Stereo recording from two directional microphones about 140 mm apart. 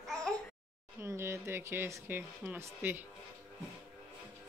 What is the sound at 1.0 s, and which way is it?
Speech, 20° right (ahead or behind).